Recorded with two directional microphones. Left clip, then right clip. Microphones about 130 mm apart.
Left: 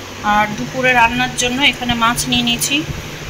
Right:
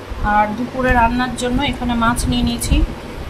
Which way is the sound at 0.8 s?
Centre (ahead or behind).